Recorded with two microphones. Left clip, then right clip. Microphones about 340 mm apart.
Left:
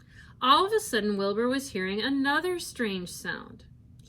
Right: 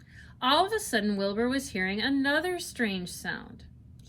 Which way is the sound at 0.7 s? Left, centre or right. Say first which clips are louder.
Left 3 dB; right.